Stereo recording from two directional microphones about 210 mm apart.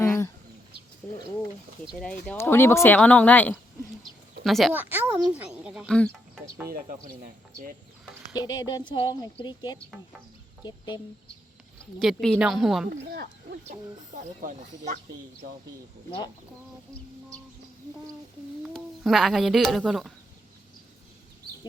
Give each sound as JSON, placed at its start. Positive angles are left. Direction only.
{"t": 0.0, "sound": "bird", "side_deg": 15}
{"t": 1.0, "sound": "a child's voice", "side_deg": 10}
{"t": 8.4, "sound": "speech", "side_deg": 20}
{"t": 11.9, "sound": "speech", "side_deg": 0}
{"t": 13.0, "sound": "speech", "side_deg": -50}
{"t": 14.4, "sound": "speech", "side_deg": -35}
{"t": 18.6, "sound": "speech", "side_deg": 0}